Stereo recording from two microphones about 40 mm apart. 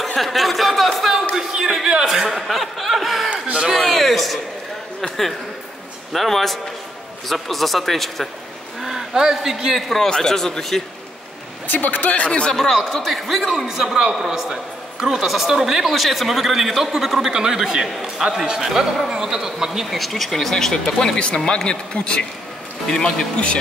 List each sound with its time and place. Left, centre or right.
0.2 s speech: centre
1.3 s a man's voice: centre
2.0 s speech: centre
6.1 s speech: centre
8.8 s a man's voice: centre
9.8 s speech: centre
10.0 s a man's voice: centre
11.6 s speech: left
12.3 s a man's voice: left
12.7 s speech: centre
13.7 s a man's voice: centre
17.3 s a man's voice: centre; by 23.6 s left